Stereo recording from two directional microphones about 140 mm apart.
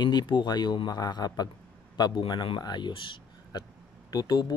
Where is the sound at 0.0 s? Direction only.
30° left (ahead or behind).